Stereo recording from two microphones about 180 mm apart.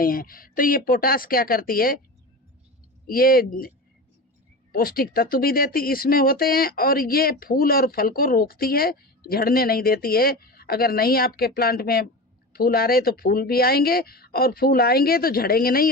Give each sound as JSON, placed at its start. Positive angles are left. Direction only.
{"t": 0.0, "sound": "a woman's voice", "side_deg": 50}
{"t": 3.2, "sound": "speech", "side_deg": 55}
{"t": 4.7, "sound": "speech", "side_deg": 55}